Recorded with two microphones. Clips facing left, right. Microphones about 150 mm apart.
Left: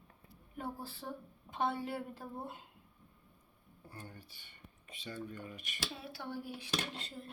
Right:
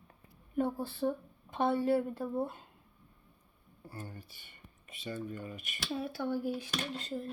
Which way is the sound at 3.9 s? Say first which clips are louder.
Right 5 dB; 5° right (ahead or behind).